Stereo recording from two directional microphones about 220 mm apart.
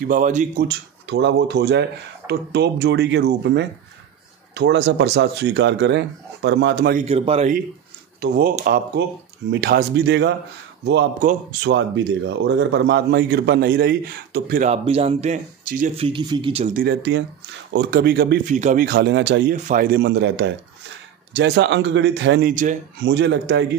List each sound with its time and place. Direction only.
0.0 s speech: 35° right (ahead or behind)
0.7 s a man's voice: 55° right (ahead or behind)
7.0 s speech: 30° right (ahead or behind)
8.2 s a man's voice: 40° right (ahead or behind)
16.0 s speech: 20° right (ahead or behind)
16.8 s a man's voice: 50° right (ahead or behind)
19.5 s a man's voice: 40° right (ahead or behind)
22.5 s speech: 35° right (ahead or behind)
23.0 s a man's voice: 55° right (ahead or behind)